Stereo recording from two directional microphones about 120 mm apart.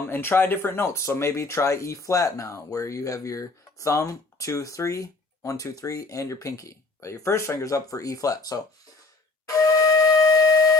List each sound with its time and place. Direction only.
0.0 s speech: 20° left (ahead or behind)
9.5 s wind instrument: 30° left (ahead or behind)